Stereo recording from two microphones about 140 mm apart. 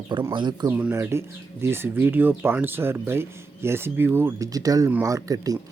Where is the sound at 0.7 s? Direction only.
15° right (ahead or behind).